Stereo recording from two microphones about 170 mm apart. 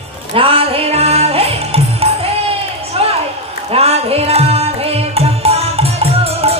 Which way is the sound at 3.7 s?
35° right (ahead or behind).